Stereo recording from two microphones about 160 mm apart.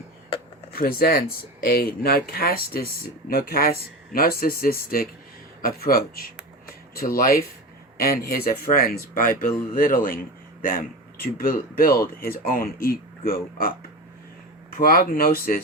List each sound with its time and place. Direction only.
0.7 s speech: 65° left (ahead or behind)